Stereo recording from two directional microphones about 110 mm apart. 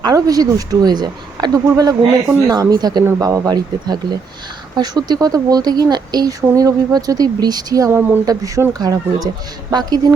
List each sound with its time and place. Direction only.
0.0 s speech: 35° right (ahead or behind)